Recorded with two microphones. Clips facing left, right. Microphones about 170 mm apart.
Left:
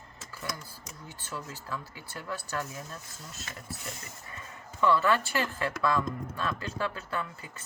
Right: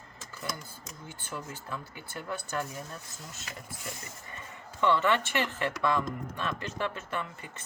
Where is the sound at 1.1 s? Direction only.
25° right (ahead or behind).